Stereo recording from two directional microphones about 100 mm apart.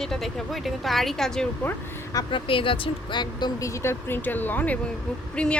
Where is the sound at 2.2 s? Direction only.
60° left (ahead or behind).